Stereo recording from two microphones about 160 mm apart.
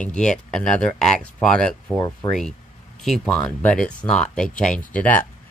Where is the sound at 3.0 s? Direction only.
5° left (ahead or behind).